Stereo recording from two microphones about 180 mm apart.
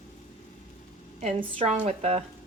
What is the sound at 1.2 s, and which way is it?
A woman's voice, 35° right (ahead or behind).